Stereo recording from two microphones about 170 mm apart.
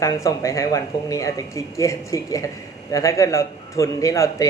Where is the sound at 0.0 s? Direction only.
20° left (ahead or behind).